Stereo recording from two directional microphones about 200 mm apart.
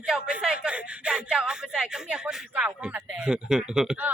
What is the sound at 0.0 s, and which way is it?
A man's voice, 5° right (ahead or behind).